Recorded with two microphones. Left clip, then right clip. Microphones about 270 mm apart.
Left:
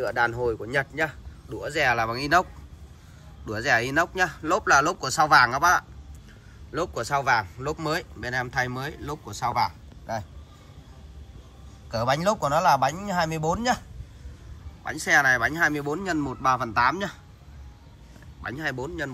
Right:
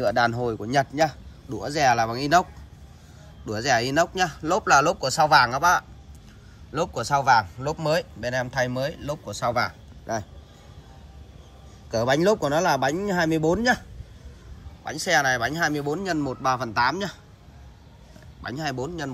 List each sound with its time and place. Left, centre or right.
0.2 s a man's voice: right; by 2.4 s centre
3.4 s speech: centre
11.9 s speech: centre
14.9 s speech: centre
18.4 s speech: centre